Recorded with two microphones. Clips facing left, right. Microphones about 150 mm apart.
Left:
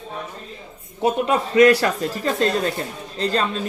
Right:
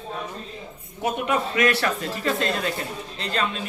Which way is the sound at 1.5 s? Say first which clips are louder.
Left 12 dB; 35° left (ahead or behind).